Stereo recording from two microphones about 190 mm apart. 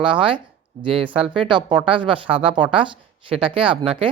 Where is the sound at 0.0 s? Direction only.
25° right (ahead or behind).